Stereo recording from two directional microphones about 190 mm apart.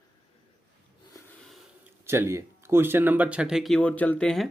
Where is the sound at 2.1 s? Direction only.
15° right (ahead or behind); by 4.4 s 5° left (ahead or behind).